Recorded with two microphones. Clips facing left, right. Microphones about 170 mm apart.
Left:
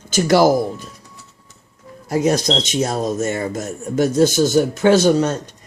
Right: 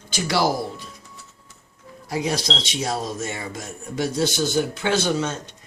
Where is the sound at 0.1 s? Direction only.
50° left (ahead or behind).